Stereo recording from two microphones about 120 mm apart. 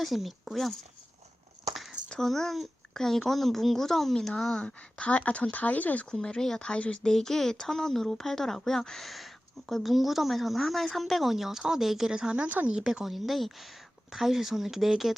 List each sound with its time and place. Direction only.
0.0 s speech: centre (ahead or behind)